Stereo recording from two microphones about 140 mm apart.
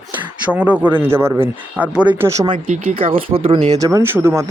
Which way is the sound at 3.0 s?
40° right (ahead or behind).